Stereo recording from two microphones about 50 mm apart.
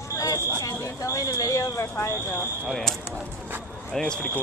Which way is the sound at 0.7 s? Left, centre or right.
Left.